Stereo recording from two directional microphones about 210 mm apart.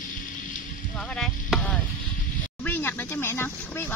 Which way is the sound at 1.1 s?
Centre (ahead or behind).